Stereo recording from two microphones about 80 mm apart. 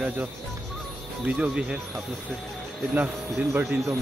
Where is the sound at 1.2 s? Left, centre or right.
Centre.